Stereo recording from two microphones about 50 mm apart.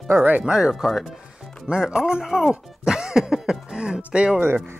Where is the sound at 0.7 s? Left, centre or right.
Centre.